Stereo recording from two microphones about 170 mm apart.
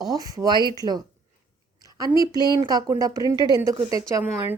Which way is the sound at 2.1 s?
25° right (ahead or behind).